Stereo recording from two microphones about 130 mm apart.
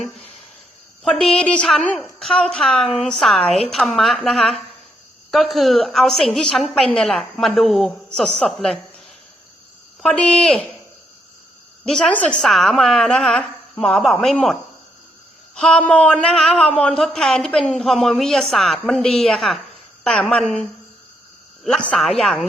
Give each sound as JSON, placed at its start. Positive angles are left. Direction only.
{"t": 0.0, "sound": "speech", "side_deg": 50}
{"t": 1.0, "sound": "a woman's voice", "side_deg": 5}
{"t": 10.0, "sound": "speech", "side_deg": 5}
{"t": 11.9, "sound": "a woman's voice", "side_deg": 5}